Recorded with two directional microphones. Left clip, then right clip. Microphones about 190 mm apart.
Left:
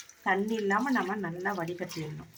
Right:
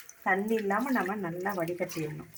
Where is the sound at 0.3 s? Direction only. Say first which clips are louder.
Even; 10° right (ahead or behind).